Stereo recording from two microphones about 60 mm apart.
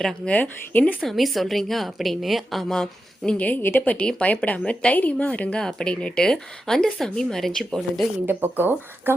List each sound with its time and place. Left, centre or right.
0.3 s a woman's voice: left
1.0 s a woman's voice: centre
3.3 s a woman's voice: left
3.6 s speech: left
4.0 s a woman's voice: centre
8.3 s speech: right